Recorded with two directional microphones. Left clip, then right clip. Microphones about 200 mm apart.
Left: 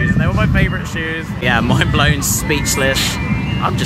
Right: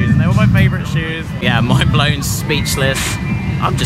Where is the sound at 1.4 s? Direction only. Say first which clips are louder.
Left 1 dB; centre (ahead or behind).